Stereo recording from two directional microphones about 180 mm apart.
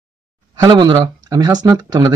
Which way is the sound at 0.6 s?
25° right (ahead or behind).